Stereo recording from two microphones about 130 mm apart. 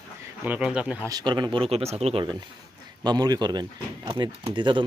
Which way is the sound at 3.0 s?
30° right (ahead or behind).